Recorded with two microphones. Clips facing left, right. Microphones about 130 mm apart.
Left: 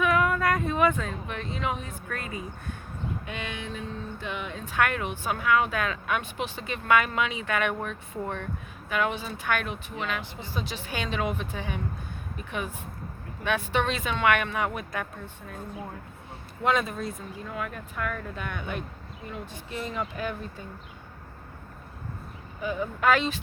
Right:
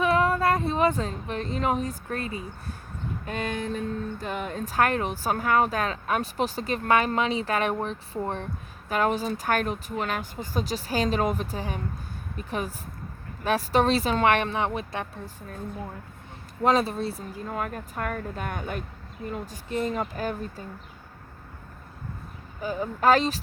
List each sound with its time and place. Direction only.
0.0 s speech: 30° right (ahead or behind)
3.2 s speech: 40° right (ahead or behind)
16.6 s speech: 35° right (ahead or behind)
22.6 s speech: 35° right (ahead or behind)